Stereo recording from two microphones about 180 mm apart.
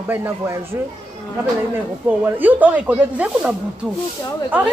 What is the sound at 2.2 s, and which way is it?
A man's voice, 10° right (ahead or behind).